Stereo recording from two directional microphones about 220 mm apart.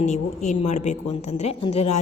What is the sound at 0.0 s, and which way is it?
A woman's voice, 30° left (ahead or behind).